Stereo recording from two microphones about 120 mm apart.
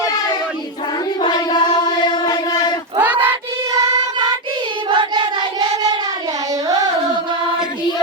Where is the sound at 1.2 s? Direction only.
40° left (ahead or behind).